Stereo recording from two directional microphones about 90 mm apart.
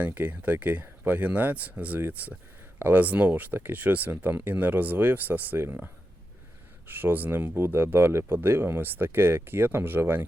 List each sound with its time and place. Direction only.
0.0 s speech: 20° right (ahead or behind)
6.8 s speech: 20° right (ahead or behind)